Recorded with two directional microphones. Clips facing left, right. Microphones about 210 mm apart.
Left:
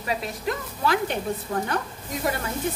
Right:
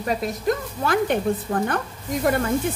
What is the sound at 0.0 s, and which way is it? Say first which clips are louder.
Speech: right 5 dB; 45° right (ahead or behind).